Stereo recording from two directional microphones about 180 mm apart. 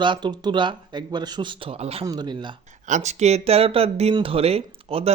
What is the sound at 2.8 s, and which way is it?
Speech, 40° right (ahead or behind).